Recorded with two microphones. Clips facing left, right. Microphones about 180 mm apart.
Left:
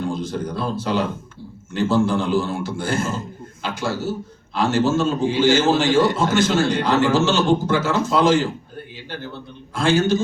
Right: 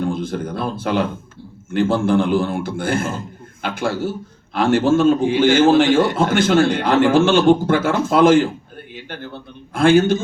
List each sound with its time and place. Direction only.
0.0 s a man's voice: 55° right (ahead or behind)